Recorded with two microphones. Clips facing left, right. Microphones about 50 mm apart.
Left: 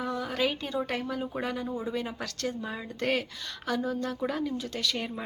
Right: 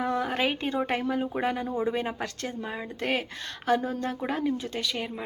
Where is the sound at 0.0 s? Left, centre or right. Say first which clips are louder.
Right 3 dB; right.